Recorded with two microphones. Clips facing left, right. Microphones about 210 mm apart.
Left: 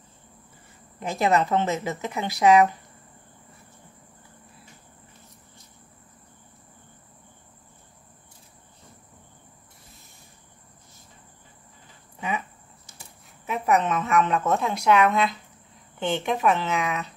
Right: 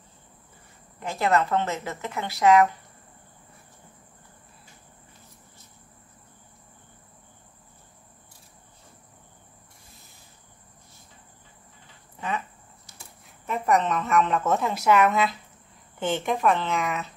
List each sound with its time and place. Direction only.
0.9 s speech: 15° left (ahead or behind)
12.2 s a sound: 10° left (ahead or behind)
13.5 s a woman's voice: centre (ahead or behind)